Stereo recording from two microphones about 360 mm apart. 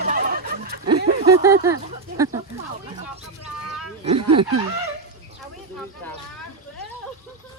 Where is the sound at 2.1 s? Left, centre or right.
Centre.